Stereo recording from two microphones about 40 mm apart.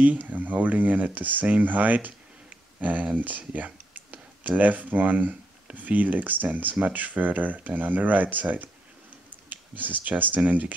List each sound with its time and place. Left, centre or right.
0.0 s speech: right